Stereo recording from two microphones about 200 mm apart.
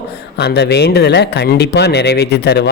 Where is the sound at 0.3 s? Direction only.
55° left (ahead or behind).